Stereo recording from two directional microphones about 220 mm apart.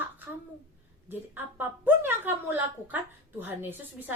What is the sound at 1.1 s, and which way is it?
Speech, 10° right (ahead or behind).